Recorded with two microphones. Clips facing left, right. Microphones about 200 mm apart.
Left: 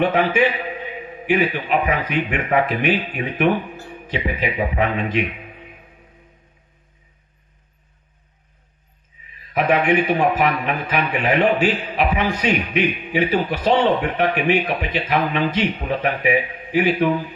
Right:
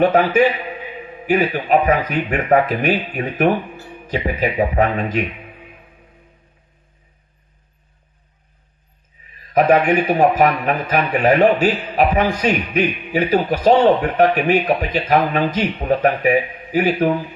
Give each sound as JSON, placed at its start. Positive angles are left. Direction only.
{"t": 0.0, "sound": "a man's voice", "side_deg": -40}
{"t": 9.5, "sound": "a man's voice", "side_deg": -40}